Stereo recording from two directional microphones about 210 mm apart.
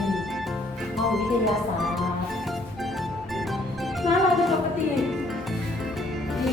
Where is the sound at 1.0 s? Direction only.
Centre (ahead or behind).